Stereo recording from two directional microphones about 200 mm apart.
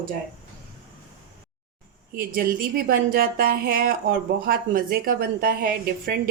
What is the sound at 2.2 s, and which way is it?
Speech, 45° right (ahead or behind).